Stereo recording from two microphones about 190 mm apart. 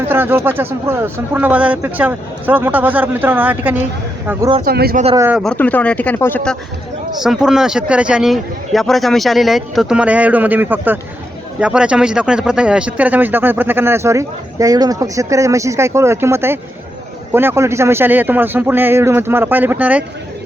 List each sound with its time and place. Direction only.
0.1 s speech: 10° right (ahead or behind)
4.6 s speech: 55° right (ahead or behind)
5.1 s speech: 10° right (ahead or behind)
5.4 s a man's voice: 5° left (ahead or behind)